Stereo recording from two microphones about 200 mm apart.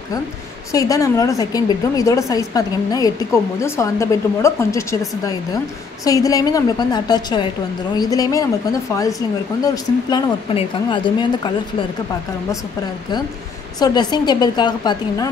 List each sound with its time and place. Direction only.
0.7 s a woman's voice: 15° left (ahead or behind)
9.6 s speech: 20° left (ahead or behind)
13.7 s speech: 20° left (ahead or behind)